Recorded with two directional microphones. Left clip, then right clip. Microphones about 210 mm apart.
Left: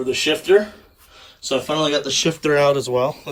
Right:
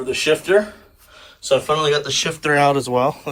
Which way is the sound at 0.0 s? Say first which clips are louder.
Right 1 dB; 20° left (ahead or behind).